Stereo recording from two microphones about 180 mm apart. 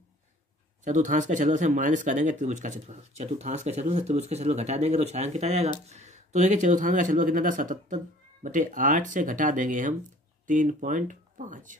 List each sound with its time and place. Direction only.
0.8 s speech: 40° right (ahead or behind)